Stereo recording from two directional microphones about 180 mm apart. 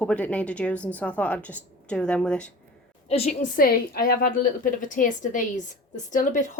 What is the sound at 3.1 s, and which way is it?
A woman's voice, 35° left (ahead or behind).